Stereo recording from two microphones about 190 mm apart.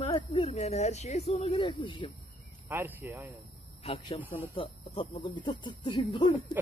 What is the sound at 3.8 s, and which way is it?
Speech, 30° left (ahead or behind).